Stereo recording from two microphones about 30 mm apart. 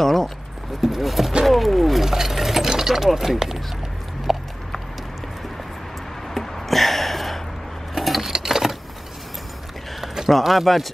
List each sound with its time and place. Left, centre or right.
0.0 s a sound: centre
0.7 s speech: centre
1.4 s wild animals: centre
2.0 s a sound: centre
2.6 s speech: centre
4.3 s clip-clop: centre
6.3 s a sound: centre
8.3 s sewing machine: centre
10.4 s speech: centre